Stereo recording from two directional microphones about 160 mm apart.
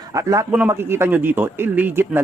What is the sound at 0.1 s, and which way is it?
A man's voice, 20° right (ahead or behind).